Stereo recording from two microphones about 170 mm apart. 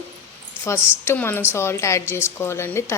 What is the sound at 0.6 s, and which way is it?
Speech, 15° left (ahead or behind).